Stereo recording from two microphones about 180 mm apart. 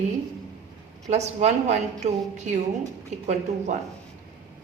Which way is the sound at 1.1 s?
40° right (ahead or behind).